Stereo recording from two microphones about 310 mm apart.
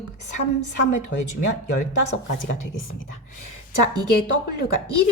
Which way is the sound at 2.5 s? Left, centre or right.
Left.